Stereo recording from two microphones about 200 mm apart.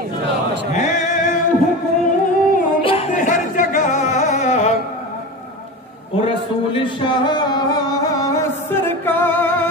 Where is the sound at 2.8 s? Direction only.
25° left (ahead or behind).